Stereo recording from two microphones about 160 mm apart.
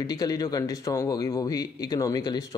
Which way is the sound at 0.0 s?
25° left (ahead or behind).